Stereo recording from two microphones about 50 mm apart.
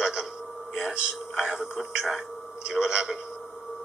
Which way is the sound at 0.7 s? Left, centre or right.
Centre.